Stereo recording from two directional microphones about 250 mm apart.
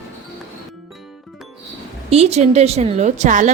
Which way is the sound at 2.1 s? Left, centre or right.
Right.